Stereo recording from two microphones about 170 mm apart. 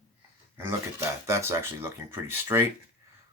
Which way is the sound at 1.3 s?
15° right (ahead or behind).